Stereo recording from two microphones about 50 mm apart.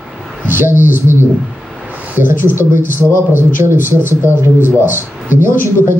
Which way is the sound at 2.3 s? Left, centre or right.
Right.